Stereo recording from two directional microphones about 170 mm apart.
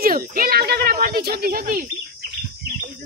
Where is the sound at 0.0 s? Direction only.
60° right (ahead or behind).